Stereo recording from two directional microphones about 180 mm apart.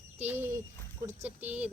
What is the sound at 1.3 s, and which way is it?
Speech, 10° right (ahead or behind).